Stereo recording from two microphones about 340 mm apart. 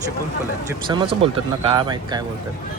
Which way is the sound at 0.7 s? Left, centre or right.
Centre.